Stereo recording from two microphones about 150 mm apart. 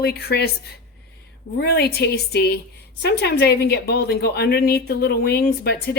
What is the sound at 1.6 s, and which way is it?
A woman's voice, 90° left.